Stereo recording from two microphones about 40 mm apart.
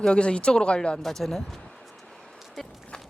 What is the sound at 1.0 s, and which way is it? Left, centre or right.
Speech, centre.